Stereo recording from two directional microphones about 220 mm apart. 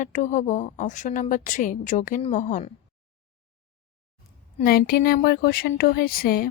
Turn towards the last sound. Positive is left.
turn(degrees=40)  # may be behind; listen again after turning